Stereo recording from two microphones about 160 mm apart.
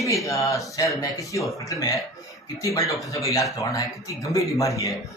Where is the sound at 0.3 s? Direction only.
20° left (ahead or behind).